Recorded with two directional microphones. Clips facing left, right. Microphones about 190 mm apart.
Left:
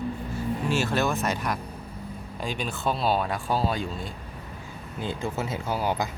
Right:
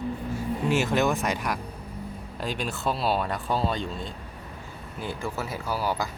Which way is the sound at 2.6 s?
Centre (ahead or behind).